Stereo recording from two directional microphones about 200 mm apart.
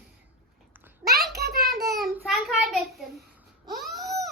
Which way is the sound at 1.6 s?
Centre (ahead or behind).